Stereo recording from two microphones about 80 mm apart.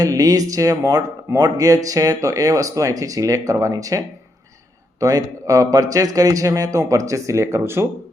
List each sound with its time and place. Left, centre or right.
0.0 s speech: right